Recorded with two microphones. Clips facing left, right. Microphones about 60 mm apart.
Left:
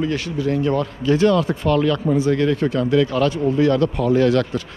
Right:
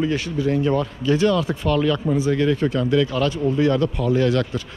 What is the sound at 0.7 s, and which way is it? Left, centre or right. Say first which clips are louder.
A man's voice: left 1 dB; left.